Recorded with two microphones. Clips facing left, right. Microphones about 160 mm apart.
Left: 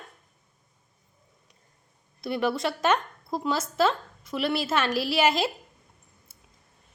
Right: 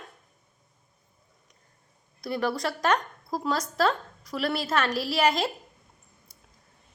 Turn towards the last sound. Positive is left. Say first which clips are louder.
# left 1 dB
turn(degrees=25)  # may be behind; listen again after turning